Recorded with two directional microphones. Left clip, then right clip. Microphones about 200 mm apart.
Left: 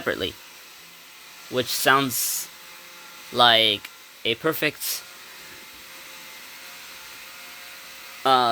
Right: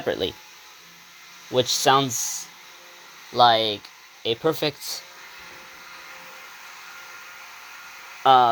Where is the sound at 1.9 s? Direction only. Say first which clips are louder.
Left 2 dB; 25° left (ahead or behind).